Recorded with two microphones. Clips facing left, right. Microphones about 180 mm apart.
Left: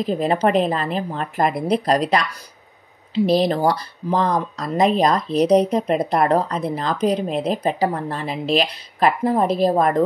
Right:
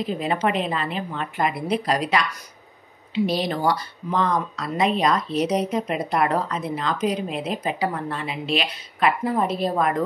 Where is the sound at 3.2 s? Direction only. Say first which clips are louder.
Left 6 dB; 35° left (ahead or behind).